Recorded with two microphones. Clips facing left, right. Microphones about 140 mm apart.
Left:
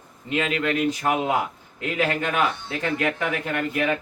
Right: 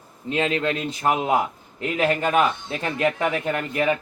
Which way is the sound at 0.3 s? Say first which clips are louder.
Right 1 dB; 30° right (ahead or behind).